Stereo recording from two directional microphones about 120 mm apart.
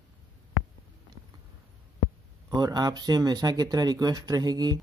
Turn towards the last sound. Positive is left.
turn(degrees=-35)  # may be behind; listen again after turning